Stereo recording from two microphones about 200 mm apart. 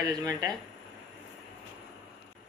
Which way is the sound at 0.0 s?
20° right (ahead or behind).